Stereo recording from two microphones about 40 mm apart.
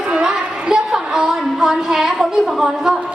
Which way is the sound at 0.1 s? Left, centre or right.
Right.